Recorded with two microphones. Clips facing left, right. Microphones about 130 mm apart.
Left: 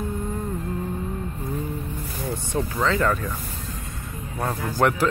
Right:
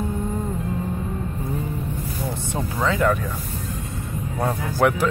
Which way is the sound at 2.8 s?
10° right (ahead or behind).